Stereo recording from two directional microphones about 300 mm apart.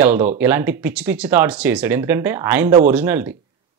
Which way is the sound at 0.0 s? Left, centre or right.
Centre.